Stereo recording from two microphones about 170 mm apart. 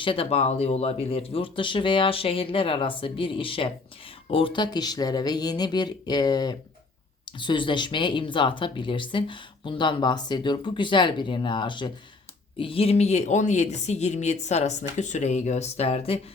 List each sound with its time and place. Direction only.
0.0 s speech: 35° left (ahead or behind)